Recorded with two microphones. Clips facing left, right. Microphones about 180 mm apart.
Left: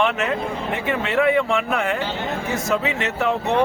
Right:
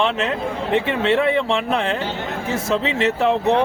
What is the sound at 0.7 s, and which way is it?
Speech, 30° right (ahead or behind).